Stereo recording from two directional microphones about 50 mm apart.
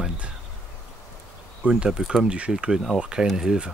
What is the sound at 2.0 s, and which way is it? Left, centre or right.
Speech, centre.